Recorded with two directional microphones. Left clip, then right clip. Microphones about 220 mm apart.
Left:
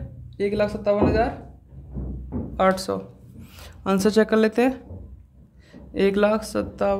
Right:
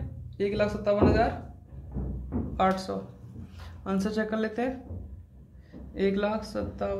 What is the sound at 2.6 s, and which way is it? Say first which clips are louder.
Speech: left 6 dB; 40° left (ahead or behind).